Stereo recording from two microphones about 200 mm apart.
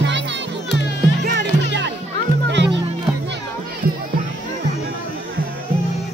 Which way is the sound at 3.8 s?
45° right (ahead or behind).